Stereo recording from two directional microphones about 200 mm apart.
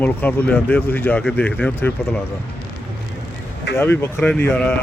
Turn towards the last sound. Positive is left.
turn(degrees=5)  # may be behind; listen again after turning